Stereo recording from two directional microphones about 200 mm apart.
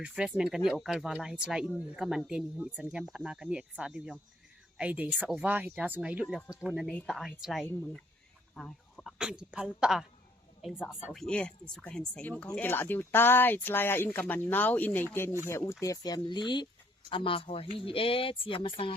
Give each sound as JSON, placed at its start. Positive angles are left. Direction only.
{"t": 0.0, "sound": "speech", "side_deg": -5}